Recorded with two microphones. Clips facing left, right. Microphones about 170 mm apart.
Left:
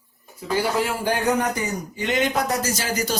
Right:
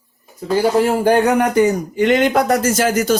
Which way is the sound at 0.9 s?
55° right (ahead or behind).